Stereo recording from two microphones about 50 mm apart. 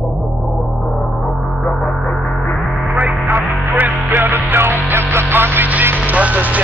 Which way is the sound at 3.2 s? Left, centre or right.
Right.